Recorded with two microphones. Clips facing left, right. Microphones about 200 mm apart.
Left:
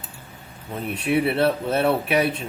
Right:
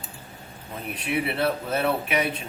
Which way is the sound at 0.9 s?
30° left (ahead or behind).